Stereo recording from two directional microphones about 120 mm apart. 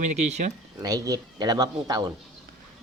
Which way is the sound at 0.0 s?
70° right (ahead or behind).